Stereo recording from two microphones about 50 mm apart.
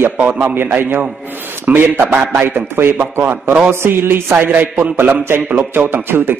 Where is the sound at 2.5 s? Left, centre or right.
Right.